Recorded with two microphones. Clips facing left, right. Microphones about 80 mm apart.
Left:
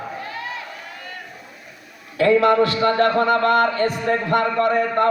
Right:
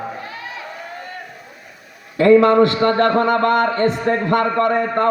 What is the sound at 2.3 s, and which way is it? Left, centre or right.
A man's voice, right.